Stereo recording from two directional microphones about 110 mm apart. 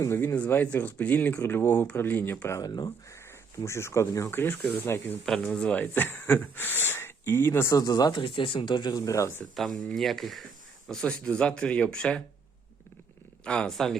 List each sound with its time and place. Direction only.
0.0 s speech: 25° left (ahead or behind)
2.6 s speech: 40° left (ahead or behind)
3.6 s speech: 25° left (ahead or behind)
5.5 s speech: 10° left (ahead or behind)
7.8 s speech: 35° left (ahead or behind)
8.2 s speech: 50° left (ahead or behind); by 9.4 s 30° left (ahead or behind)
9.6 s speech: centre (ahead or behind)
13.4 s speech: 10° left (ahead or behind)